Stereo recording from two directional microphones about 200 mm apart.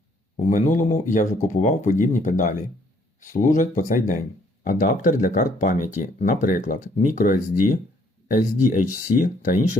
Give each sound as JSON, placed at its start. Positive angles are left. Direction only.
{"t": 0.3, "sound": "speech", "side_deg": 35}